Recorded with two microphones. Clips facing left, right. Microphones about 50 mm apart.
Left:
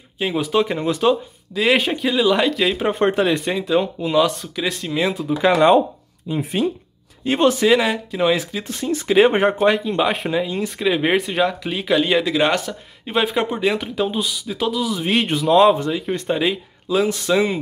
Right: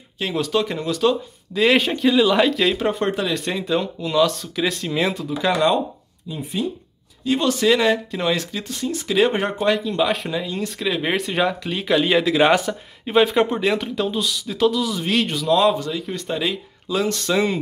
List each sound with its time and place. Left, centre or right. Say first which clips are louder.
0.2 s speech: left 2 dB; centre
1.5 s speech: even; centre
3.0 s speech: left 5 dB; left
3.3 s speech: left 3 dB; centre
4.4 s speech: right 1 dB; centre
5.1 s speech: left 5 dB; centre
6.2 s speech: left 5 dB; left
7.2 s speech: left 4 dB; left
7.6 s speech: left 1 dB; centre
8.6 s speech: left 4 dB; left
10.2 s speech: left 4 dB; centre
15.7 s speech: left 4 dB; left